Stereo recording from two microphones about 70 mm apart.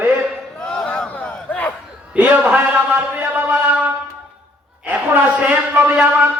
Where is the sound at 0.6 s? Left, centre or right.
Centre.